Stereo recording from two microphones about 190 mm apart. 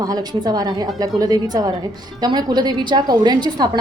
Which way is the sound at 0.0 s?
20° right (ahead or behind).